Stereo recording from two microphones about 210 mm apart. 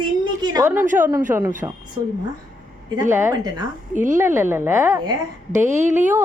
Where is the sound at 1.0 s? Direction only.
15° right (ahead or behind).